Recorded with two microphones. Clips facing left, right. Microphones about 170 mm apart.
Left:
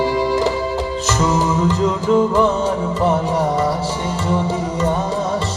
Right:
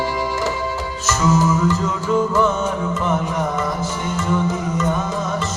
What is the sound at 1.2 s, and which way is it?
Music, 35° left (ahead or behind).